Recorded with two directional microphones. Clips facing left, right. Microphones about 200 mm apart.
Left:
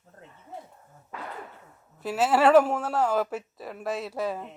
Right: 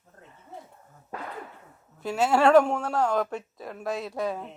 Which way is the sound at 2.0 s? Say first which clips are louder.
Even; centre (ahead or behind).